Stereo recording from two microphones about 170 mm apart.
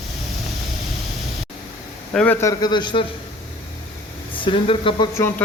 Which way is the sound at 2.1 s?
10° left (ahead or behind).